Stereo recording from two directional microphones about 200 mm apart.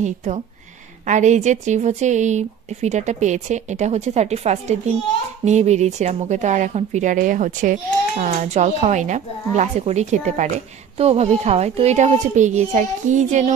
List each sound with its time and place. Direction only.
0.0 s speech: 35° right (ahead or behind)